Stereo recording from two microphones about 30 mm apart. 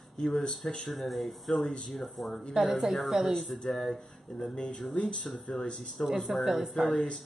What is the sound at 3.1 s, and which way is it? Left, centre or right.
Speech, centre.